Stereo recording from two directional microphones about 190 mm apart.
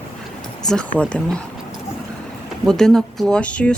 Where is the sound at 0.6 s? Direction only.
5° left (ahead or behind).